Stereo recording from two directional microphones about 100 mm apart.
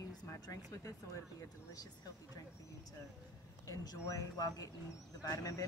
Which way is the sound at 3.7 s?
35° left (ahead or behind).